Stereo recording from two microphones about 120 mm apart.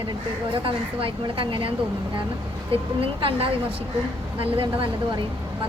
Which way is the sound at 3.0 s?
50° right (ahead or behind).